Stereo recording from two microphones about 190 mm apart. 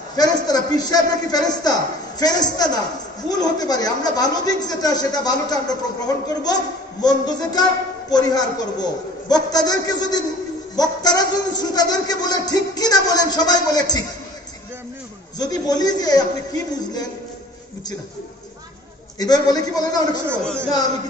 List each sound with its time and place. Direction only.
0.1 s a man's voice: 20° left (ahead or behind)
15.3 s a man's voice: 20° left (ahead or behind)
19.1 s a man's voice: 20° left (ahead or behind)